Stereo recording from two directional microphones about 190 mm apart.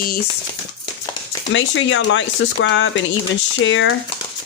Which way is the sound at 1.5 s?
80° left.